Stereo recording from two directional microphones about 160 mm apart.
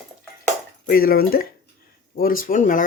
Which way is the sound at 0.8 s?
70° left (ahead or behind).